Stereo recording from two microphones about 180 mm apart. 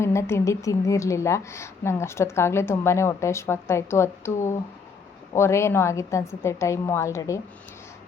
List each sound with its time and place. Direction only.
0.0 s a woman's voice: 15° left (ahead or behind)